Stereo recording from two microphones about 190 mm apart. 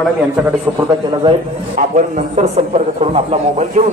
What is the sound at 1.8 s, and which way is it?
A man's voice, 40° right (ahead or behind).